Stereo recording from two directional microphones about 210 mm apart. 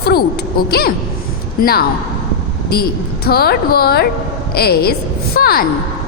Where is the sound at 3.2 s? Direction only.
45° left (ahead or behind).